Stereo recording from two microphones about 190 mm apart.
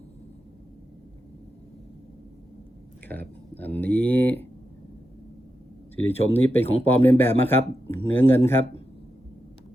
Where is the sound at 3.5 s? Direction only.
10° left (ahead or behind).